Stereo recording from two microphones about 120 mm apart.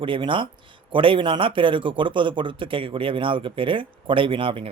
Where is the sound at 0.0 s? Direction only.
45° right (ahead or behind).